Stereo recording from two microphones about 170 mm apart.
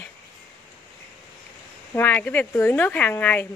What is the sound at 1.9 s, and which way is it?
Speech, 10° left (ahead or behind).